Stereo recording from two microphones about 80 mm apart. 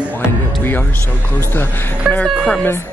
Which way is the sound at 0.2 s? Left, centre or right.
Left.